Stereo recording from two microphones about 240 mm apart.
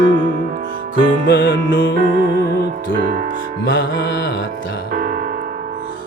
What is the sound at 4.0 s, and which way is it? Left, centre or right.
Music, left.